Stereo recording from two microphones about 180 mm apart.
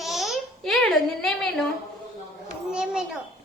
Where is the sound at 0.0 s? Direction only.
Centre (ahead or behind).